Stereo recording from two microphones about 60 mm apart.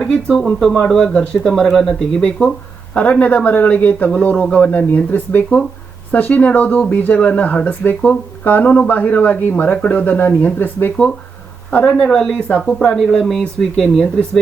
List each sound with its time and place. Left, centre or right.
0.0 s speech: centre
1.6 s speech: centre
2.9 s speech: left
11.9 s speech: centre
12.5 s speech: centre
12.9 s speech: centre